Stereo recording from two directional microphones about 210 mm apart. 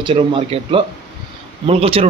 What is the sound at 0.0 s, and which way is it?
Speech, 25° right (ahead or behind).